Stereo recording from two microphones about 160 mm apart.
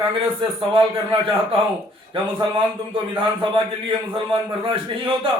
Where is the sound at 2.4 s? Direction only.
30° right (ahead or behind).